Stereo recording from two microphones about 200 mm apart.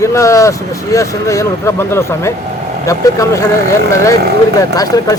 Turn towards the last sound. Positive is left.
turn(degrees=15)  # may be behind; listen again after turning